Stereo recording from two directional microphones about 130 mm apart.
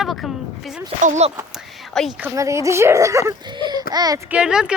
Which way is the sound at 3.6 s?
35° right (ahead or behind).